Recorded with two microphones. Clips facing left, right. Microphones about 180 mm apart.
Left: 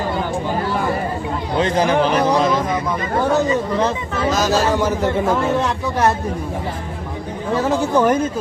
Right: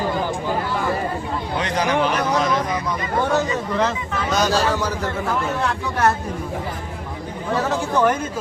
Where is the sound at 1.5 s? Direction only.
30° left (ahead or behind).